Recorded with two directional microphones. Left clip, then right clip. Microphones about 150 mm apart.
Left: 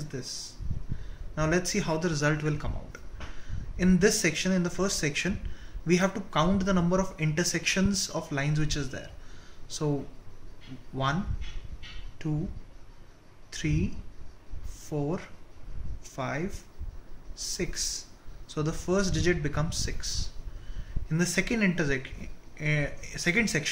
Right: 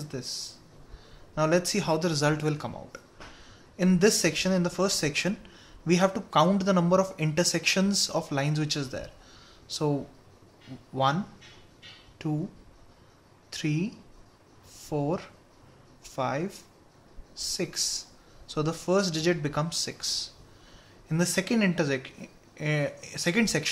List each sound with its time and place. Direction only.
0.1 s speech: 90° right
13.5 s speech: 90° right